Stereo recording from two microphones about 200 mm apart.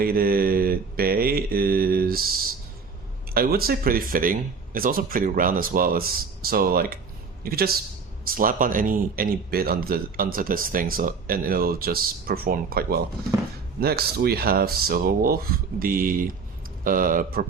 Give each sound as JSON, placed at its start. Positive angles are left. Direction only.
{"t": 0.0, "sound": "speech", "side_deg": -50}
{"t": 3.3, "sound": "a man's voice", "side_deg": -50}